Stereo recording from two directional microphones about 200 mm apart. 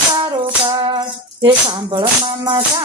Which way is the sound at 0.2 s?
25° right (ahead or behind).